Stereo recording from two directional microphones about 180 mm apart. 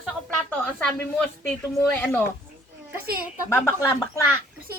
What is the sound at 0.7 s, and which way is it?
A woman's voice, 5° left (ahead or behind).